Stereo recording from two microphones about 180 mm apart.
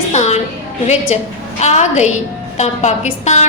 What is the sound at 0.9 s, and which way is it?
A woman's voice, 40° left (ahead or behind).